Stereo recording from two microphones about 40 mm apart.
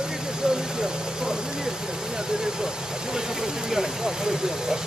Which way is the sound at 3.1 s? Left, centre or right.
Centre.